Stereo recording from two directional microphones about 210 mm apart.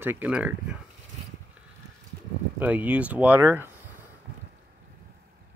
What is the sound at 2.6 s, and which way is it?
Speech, 5° right (ahead or behind).